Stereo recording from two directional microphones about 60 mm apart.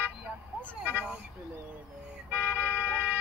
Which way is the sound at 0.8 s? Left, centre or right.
Right.